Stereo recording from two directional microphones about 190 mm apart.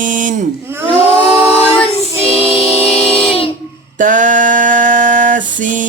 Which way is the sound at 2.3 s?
30° left (ahead or behind).